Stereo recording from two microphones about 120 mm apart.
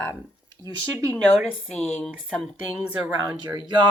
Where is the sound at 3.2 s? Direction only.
30° right (ahead or behind).